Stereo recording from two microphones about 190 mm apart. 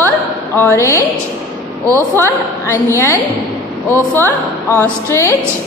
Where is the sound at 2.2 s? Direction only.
15° left (ahead or behind).